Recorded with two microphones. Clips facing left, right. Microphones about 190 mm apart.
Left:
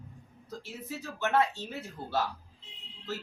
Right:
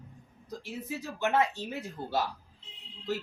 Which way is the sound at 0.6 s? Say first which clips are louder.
Right 4 dB; 15° right (ahead or behind).